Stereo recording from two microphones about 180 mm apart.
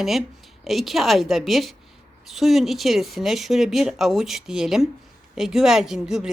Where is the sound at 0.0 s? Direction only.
Centre (ahead or behind).